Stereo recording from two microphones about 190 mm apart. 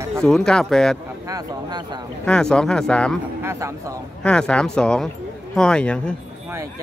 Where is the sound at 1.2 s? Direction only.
20° right (ahead or behind).